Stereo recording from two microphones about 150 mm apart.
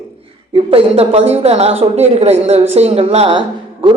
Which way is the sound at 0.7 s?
40° right (ahead or behind).